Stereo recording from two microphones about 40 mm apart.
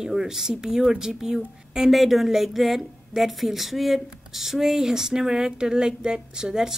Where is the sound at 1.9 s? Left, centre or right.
Centre.